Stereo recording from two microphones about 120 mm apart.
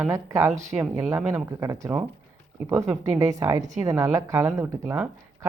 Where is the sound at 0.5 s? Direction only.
75° right (ahead or behind).